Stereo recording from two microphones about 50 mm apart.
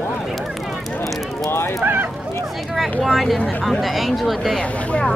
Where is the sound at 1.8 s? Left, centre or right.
Right.